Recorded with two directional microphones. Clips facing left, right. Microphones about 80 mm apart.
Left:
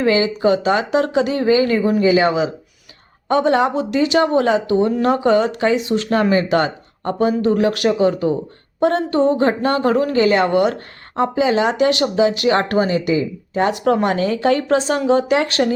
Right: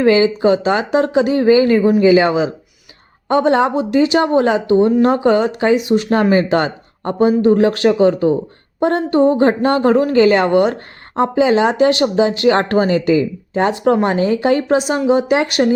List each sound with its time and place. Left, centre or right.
0.0 s speech: right
9.5 s a woman's voice: right